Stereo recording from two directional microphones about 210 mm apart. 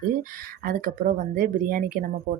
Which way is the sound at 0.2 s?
40° right (ahead or behind).